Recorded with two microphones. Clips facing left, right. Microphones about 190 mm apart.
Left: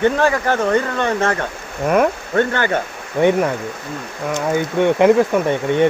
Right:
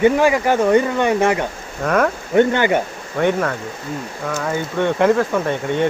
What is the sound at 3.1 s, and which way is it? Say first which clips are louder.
Speech: left 3 dB; 15° left (ahead or behind).